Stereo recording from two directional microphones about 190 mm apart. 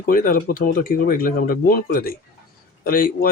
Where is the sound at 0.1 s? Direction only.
45° left (ahead or behind).